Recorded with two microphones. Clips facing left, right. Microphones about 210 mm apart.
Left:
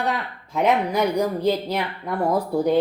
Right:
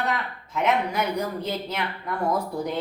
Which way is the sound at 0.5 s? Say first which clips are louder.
Left 4 dB; 35° left (ahead or behind).